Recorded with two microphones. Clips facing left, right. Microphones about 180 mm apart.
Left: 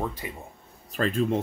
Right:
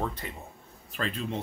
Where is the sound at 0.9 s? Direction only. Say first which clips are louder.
Left 8 dB; 45° left (ahead or behind).